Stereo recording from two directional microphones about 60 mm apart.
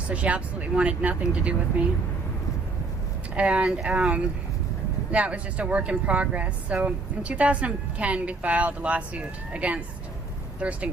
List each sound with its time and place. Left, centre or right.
0.1 s speech: right
3.3 s speech: right